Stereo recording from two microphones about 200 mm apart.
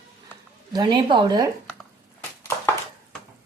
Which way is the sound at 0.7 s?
20° right (ahead or behind).